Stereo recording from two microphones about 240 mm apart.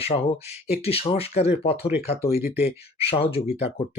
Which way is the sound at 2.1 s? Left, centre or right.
Left.